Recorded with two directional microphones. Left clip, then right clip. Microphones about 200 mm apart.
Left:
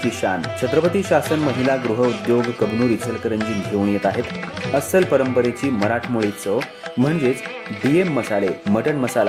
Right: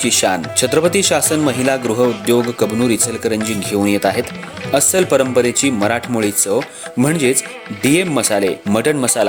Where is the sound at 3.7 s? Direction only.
35° right (ahead or behind).